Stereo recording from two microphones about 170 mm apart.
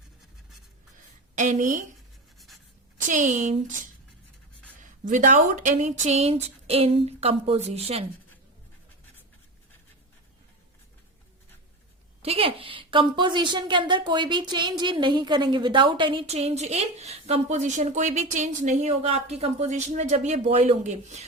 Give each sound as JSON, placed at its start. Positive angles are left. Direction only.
{"t": 1.4, "sound": "a woman's voice", "side_deg": -45}
{"t": 3.1, "sound": "a woman's voice", "side_deg": -45}
{"t": 4.8, "sound": "a woman's voice", "side_deg": -50}
{"t": 12.2, "sound": "a woman's voice", "side_deg": -35}